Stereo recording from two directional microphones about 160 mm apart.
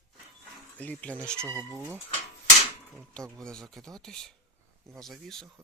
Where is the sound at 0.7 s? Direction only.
10° left (ahead or behind).